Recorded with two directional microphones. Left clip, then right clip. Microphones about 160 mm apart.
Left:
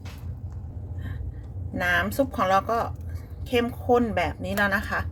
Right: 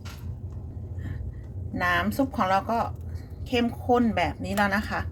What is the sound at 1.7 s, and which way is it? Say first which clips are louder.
A woman's voice: left 1 dB; 40° left (ahead or behind).